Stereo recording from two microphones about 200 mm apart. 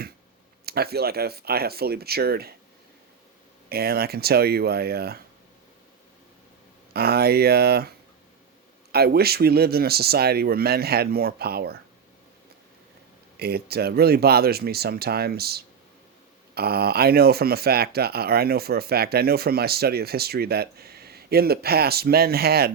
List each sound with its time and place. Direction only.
0.6 s speech: 50° right (ahead or behind)
3.7 s speech: 50° right (ahead or behind)
6.9 s speech: 50° right (ahead or behind)
8.9 s speech: 50° right (ahead or behind)
13.3 s speech: 50° right (ahead or behind)